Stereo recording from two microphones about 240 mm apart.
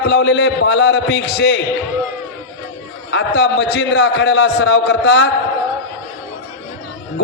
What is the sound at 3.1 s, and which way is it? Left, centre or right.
Speech, left.